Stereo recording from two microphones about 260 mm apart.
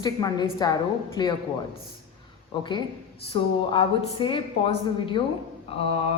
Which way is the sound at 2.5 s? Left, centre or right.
Centre.